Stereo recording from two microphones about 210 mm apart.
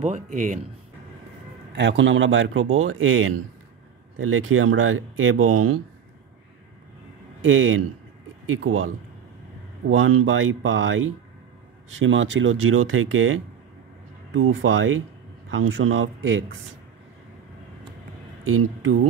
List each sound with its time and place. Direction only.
0.0 s speech: 35° right (ahead or behind)
1.7 s speech: 60° right (ahead or behind); by 5.8 s 80° right
7.4 s speech: 70° right (ahead or behind)
8.6 s a man's voice: 85° right; by 16.5 s 65° right (ahead or behind)
18.4 s speech: 85° right